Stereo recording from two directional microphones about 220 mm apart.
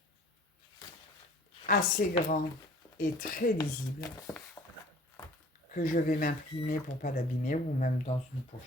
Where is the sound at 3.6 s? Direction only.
15° left (ahead or behind).